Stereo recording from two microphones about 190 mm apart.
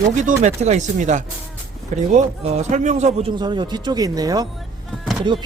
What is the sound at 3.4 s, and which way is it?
Speech, 25° right (ahead or behind).